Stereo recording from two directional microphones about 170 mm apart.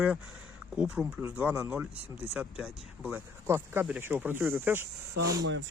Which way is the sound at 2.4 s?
5° right (ahead or behind).